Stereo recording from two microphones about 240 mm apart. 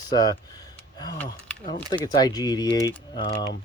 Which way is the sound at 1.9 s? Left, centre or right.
Centre.